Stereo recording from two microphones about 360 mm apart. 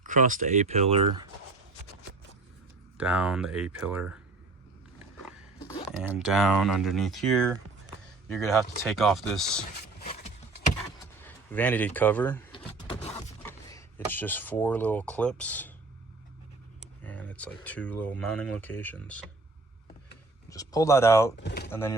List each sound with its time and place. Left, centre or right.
0.0 s speech: right
3.0 s speech: centre
6.0 s speech: centre
10.0 s a sound: left
11.2 s power windows: centre
13.4 s speech: centre
17.0 s speech: centre
20.5 s speech: centre
21.4 s a sound: left
21.7 s speech: centre